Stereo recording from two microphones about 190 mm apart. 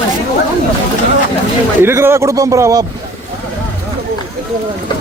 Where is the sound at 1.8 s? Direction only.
15° right (ahead or behind).